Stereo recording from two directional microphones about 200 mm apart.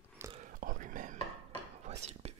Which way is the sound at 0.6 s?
45° right (ahead or behind).